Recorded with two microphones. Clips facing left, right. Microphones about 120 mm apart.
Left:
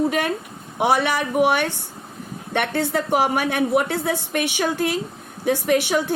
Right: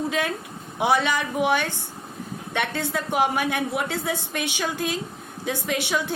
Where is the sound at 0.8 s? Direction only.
60° left (ahead or behind).